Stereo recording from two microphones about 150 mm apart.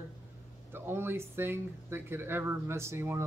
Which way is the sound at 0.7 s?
15° right (ahead or behind).